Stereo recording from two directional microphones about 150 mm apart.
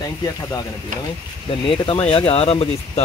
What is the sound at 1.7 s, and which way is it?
Speech, 35° left (ahead or behind).